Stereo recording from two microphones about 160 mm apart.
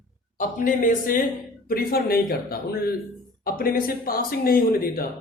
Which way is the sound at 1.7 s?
70° left (ahead or behind).